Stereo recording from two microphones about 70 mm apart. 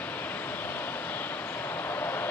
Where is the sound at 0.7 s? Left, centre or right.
Left.